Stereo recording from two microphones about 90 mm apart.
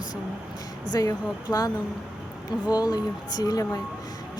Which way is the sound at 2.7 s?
45° left (ahead or behind).